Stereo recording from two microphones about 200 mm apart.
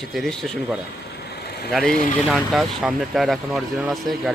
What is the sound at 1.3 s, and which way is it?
Vehicle, 55° left (ahead or behind).